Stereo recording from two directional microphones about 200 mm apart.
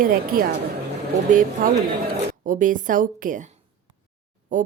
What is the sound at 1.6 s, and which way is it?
A woman's voice, 45° right (ahead or behind).